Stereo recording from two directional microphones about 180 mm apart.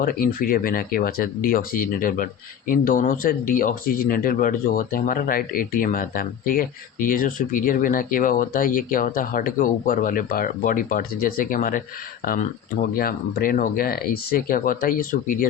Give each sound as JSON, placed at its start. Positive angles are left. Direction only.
{"t": 0.0, "sound": "speech", "side_deg": 55}